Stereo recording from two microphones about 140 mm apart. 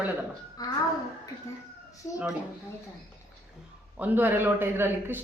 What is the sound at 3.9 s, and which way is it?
Speech, 10° right (ahead or behind).